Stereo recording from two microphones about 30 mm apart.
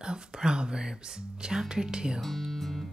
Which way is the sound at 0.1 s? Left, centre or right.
Right.